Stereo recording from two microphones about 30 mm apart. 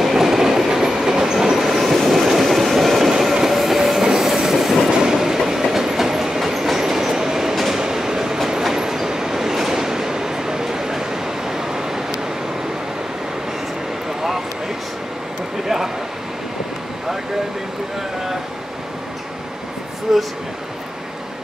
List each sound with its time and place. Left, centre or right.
0.0 s train: centre
5.1 s train: centre
7.5 s train: centre
7.8 s train: right
15.6 s a sound: centre
20.1 s a sound: centre